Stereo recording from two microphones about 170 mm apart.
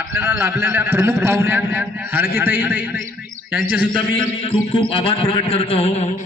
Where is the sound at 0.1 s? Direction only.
15° right (ahead or behind).